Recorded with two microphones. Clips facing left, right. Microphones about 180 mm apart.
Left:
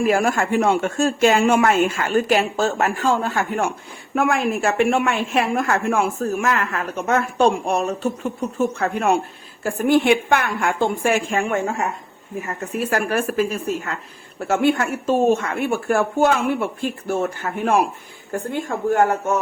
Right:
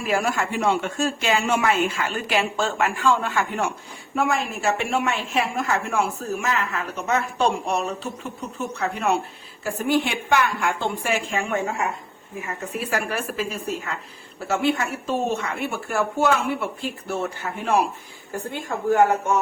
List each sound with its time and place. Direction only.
0.0 s a woman's voice: 50° left (ahead or behind)
4.1 s a woman's voice: 55° left (ahead or behind)
12.9 s a woman's voice: 50° left (ahead or behind)